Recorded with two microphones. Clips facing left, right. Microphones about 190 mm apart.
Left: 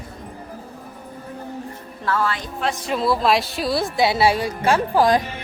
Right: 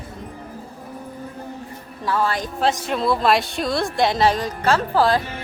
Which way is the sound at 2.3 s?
35° right (ahead or behind).